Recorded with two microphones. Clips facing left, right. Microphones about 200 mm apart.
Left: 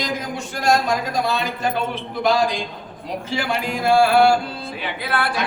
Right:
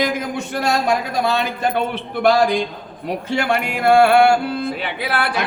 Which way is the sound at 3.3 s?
60° right (ahead or behind).